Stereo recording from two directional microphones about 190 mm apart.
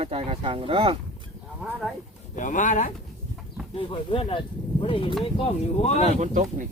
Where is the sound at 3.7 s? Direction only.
30° left (ahead or behind).